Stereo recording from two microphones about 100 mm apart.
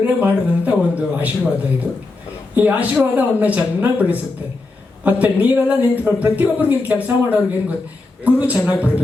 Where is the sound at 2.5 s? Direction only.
15° right (ahead or behind).